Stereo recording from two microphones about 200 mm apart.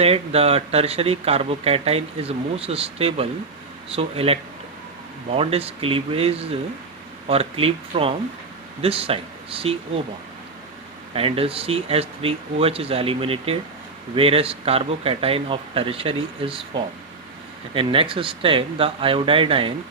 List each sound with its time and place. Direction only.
0.0 s speech: 30° right (ahead or behind)
11.1 s speech: 30° right (ahead or behind)